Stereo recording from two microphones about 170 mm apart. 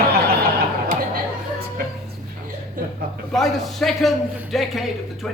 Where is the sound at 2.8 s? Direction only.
55° right (ahead or behind).